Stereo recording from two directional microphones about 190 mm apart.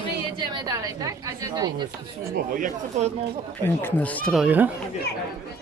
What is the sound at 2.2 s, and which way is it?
Speech, 45° right (ahead or behind).